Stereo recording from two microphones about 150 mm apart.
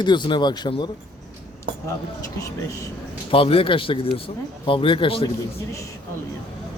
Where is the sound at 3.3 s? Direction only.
40° left (ahead or behind).